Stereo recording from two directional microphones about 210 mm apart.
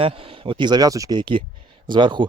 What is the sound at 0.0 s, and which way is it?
A man's voice, 25° right (ahead or behind).